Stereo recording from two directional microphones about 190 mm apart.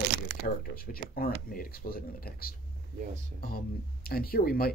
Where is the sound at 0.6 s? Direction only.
50° left (ahead or behind).